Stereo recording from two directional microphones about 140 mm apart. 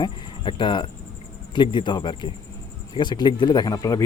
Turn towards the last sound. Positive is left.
turn(degrees=25)  # may be behind; listen again after turning